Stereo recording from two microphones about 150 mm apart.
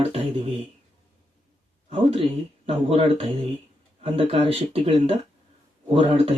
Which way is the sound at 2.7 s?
40° right (ahead or behind).